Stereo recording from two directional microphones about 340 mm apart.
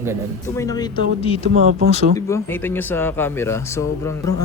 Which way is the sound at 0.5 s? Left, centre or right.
Centre.